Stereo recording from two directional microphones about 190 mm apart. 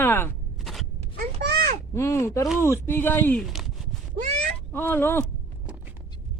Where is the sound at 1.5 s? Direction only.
50° right (ahead or behind).